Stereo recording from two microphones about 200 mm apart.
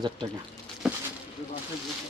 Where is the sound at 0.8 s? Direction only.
5° right (ahead or behind).